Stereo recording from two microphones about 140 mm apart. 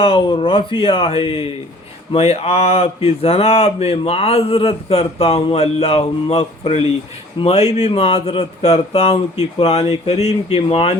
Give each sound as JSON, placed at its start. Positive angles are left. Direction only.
{"t": 0.0, "sound": "speech", "side_deg": 40}